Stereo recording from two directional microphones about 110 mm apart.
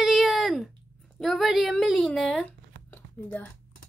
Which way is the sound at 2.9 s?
15° left (ahead or behind).